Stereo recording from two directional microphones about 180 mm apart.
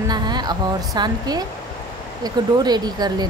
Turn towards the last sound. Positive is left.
turn(degrees=-20)  # may be behind; listen again after turning